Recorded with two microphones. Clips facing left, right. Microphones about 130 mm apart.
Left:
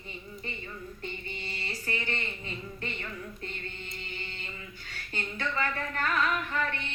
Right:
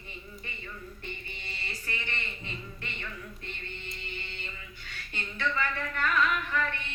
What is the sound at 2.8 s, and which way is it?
Speech, 40° left (ahead or behind).